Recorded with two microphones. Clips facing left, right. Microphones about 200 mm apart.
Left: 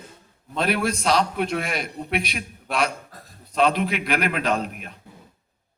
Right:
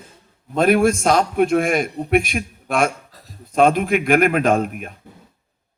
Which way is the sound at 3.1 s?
50° left (ahead or behind).